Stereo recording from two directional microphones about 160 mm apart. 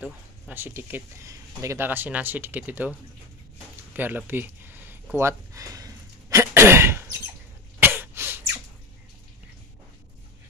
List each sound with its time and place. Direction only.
0.0 s speech: 10° right (ahead or behind)
3.9 s a sound: 10° right (ahead or behind)
7.8 s cough: 15° right (ahead or behind)